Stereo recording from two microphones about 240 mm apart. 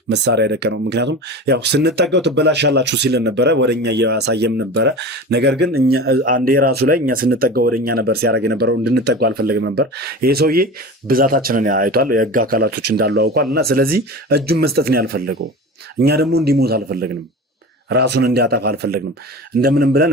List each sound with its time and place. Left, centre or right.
0.1 s speech: right
5.7 s speech: right
6.2 s speech: right